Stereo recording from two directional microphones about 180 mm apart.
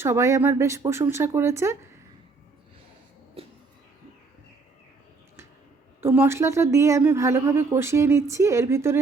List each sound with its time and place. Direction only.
0.0 s a woman's voice: 15° right (ahead or behind)
3.4 s cat: 35° right (ahead or behind)
6.0 s a woman's voice: 15° right (ahead or behind)